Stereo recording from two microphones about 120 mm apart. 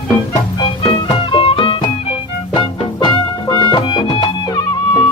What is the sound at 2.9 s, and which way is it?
Music, 35° left (ahead or behind).